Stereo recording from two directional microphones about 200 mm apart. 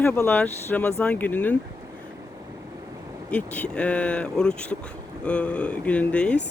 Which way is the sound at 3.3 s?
5° left (ahead or behind).